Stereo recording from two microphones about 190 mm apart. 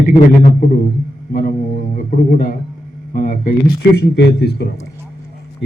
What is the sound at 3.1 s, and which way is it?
Speech, 45° left (ahead or behind).